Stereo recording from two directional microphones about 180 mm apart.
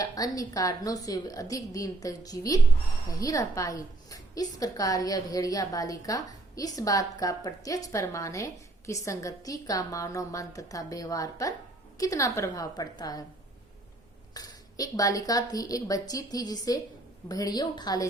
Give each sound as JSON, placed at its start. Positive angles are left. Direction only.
{"t": 0.0, "sound": "a woman's voice", "side_deg": 20}
{"t": 14.3, "sound": "a woman's voice", "side_deg": 20}